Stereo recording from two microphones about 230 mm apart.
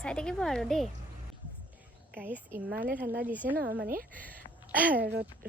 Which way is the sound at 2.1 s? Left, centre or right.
Centre.